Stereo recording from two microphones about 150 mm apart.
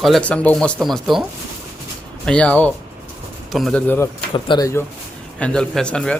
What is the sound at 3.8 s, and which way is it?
Speech, 15° left (ahead or behind).